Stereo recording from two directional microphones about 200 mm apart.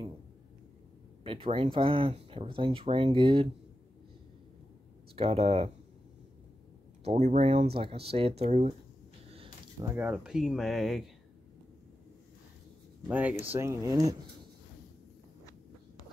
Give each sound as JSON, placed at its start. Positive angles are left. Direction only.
{"t": 1.2, "sound": "speech", "side_deg": -25}
{"t": 5.1, "sound": "speech", "side_deg": -30}
{"t": 7.1, "sound": "speech", "side_deg": -35}
{"t": 9.8, "sound": "speech", "side_deg": -10}
{"t": 13.1, "sound": "speech", "side_deg": -10}